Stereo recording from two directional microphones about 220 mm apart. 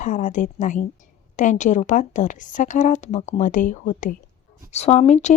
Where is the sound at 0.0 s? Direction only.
35° left (ahead or behind).